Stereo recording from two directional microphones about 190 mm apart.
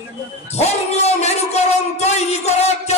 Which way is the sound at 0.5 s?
35° left (ahead or behind).